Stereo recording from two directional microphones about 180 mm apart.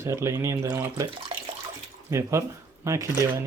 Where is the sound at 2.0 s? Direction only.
15° right (ahead or behind).